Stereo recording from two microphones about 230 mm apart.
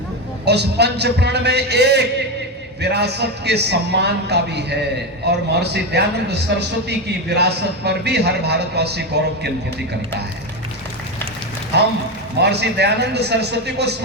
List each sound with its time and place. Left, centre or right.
0.4 s a man's voice: right
11.7 s a man's voice: right